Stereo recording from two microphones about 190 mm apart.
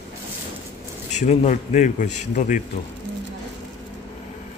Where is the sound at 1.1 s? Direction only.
35° left (ahead or behind).